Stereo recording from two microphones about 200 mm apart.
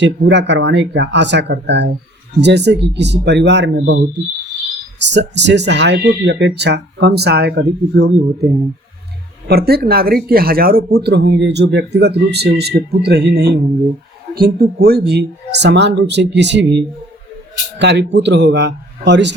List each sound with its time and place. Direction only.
0.0 s speech: 60° right (ahead or behind)
9.5 s speech: 50° right (ahead or behind)